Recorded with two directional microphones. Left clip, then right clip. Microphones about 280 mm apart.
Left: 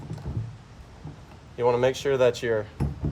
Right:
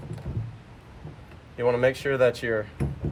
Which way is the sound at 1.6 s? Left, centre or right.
Centre.